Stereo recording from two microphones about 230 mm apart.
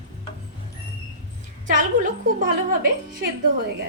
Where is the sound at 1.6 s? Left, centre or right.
Right.